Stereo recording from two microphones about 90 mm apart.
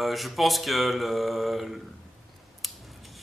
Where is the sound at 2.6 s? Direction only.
Centre (ahead or behind).